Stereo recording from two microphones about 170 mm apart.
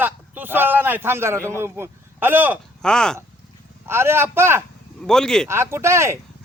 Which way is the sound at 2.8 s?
5° left (ahead or behind).